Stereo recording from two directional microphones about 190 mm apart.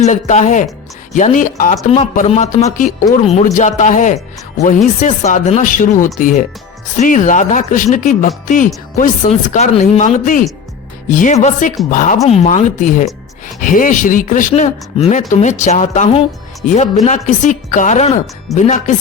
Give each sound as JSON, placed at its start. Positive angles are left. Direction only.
{"t": 0.0, "sound": "speech", "side_deg": 40}